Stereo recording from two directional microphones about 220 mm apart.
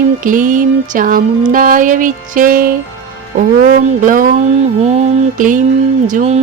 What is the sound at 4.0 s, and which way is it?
Music, 40° right (ahead or behind).